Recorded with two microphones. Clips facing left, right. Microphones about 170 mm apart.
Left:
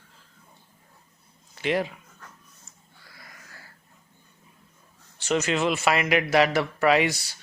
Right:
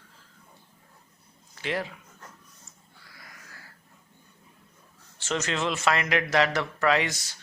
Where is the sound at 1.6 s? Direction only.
20° left (ahead or behind).